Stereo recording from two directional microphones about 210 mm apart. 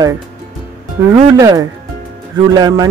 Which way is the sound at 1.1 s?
15° right (ahead or behind).